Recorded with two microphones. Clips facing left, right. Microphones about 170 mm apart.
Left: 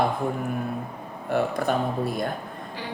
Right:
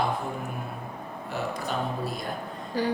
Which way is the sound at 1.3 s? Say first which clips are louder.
Left 7 dB; 55° left (ahead or behind).